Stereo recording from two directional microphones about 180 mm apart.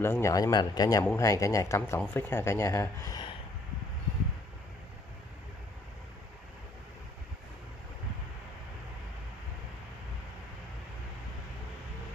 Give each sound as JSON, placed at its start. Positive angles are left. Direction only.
{"t": 0.0, "sound": "a man's voice", "side_deg": 15}